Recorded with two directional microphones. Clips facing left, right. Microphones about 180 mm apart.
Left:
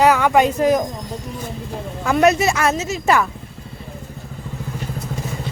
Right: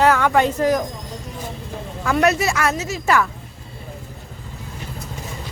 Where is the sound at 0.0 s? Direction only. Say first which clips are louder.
Left 2 dB; 15° left (ahead or behind).